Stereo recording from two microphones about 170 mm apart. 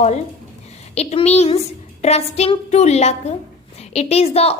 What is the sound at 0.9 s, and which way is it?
A woman's voice, 40° left (ahead or behind).